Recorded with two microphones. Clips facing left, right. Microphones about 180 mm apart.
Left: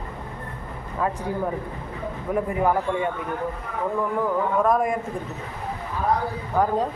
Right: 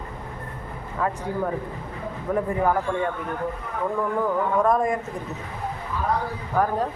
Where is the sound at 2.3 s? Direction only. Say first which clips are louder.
Even; 15° left (ahead or behind).